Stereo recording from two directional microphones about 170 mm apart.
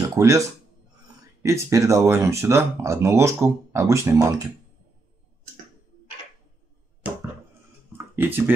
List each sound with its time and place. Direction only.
0.1 s speech: 20° right (ahead or behind)
1.4 s speech: 20° right (ahead or behind)
8.2 s speech: 10° right (ahead or behind)